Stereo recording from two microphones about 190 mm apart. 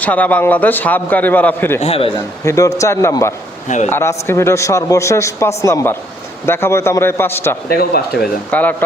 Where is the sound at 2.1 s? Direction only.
15° left (ahead or behind).